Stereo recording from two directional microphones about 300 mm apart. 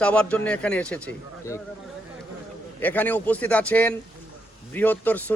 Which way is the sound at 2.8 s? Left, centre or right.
Centre.